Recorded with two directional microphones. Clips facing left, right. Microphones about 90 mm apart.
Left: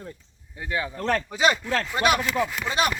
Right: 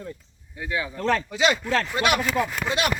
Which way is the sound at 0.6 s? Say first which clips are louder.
Right 1 dB; 40° left (ahead or behind).